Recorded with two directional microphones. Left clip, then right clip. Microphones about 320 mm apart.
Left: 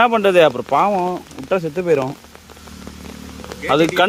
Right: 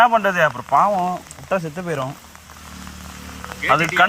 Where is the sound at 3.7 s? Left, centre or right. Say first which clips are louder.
Left 1 dB; centre.